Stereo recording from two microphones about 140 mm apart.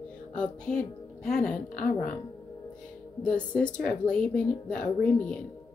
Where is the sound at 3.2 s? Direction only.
10° left (ahead or behind).